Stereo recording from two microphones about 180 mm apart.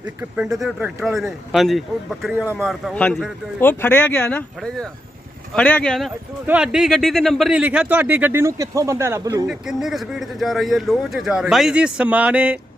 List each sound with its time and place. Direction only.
0.0 s speech: 5° right (ahead or behind)
2.3 s speech: 10° right (ahead or behind)
2.6 s speech: 5° left (ahead or behind)
6.4 s speech: 5° right (ahead or behind)
9.5 s speech: 5° right (ahead or behind)